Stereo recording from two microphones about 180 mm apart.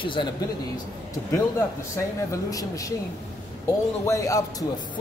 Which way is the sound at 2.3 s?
20° left (ahead or behind).